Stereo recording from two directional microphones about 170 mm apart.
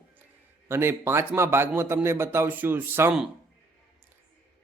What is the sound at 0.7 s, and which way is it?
A man's voice, 15° right (ahead or behind).